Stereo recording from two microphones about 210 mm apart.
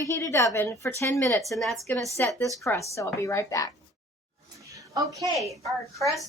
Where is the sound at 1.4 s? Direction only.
Centre (ahead or behind).